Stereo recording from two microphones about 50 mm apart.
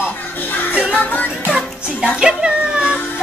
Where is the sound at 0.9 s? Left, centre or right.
Left.